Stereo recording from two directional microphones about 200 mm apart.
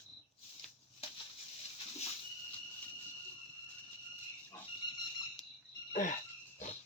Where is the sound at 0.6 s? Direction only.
Centre (ahead or behind).